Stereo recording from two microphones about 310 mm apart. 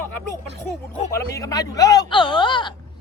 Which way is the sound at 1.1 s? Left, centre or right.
Centre.